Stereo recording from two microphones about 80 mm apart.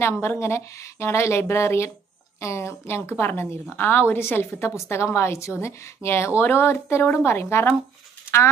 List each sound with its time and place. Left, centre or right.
0.0 s a woman's voice: left